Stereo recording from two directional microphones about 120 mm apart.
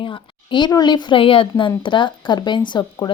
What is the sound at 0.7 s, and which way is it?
Speech, 35° left (ahead or behind).